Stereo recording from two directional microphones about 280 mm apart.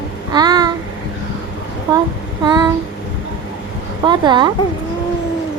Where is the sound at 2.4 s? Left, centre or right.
Centre.